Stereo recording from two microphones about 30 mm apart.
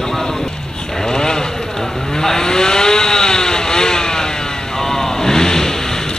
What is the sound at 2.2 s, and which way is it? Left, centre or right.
Vehicle, centre.